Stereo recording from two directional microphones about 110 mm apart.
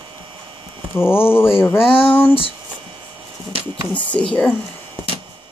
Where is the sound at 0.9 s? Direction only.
20° left (ahead or behind).